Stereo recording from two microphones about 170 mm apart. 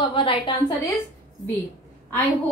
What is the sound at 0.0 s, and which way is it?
Speech, 30° left (ahead or behind).